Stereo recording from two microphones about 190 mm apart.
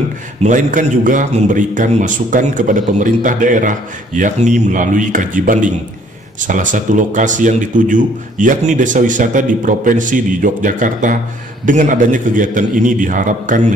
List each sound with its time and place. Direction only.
0.4 s a man's voice: 40° right (ahead or behind)